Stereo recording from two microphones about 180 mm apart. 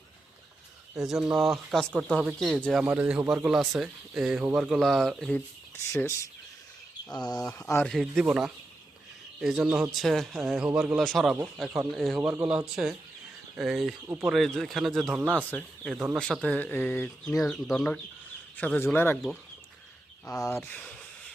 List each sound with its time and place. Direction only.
0.9 s speech: centre (ahead or behind)
2.8 s speech: 10° right (ahead or behind)
5.9 s a man's voice: 15° left (ahead or behind)
7.7 s a man's voice: 5° left (ahead or behind)
20.4 s a man's voice: 15° left (ahead or behind)